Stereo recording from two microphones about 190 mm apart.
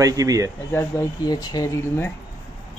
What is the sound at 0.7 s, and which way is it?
Speech, 20° left (ahead or behind).